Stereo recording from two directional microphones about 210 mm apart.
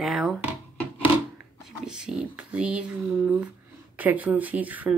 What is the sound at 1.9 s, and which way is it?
Speech, 5° right (ahead or behind).